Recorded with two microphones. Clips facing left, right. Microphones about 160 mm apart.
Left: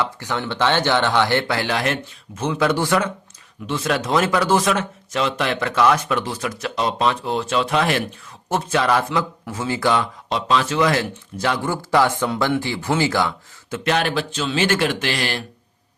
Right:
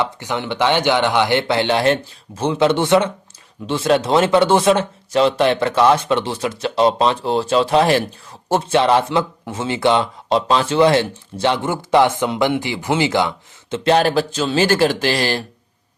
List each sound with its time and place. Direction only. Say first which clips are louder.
0.0 s speech: right 2 dB; 20° right (ahead or behind)